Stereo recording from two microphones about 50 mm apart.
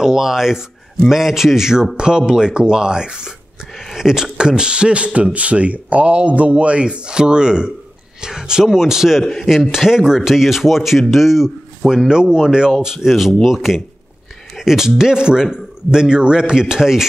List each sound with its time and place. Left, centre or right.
0.0 s speech: centre
9.2 s speech: centre
9.5 s speech: centre
12.1 s speech: centre